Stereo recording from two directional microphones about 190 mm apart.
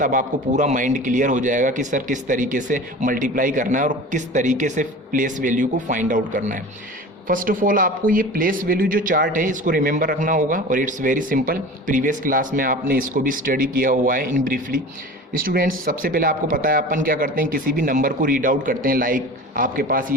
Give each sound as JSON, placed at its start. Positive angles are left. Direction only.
{"t": 0.0, "sound": "speech", "side_deg": -45}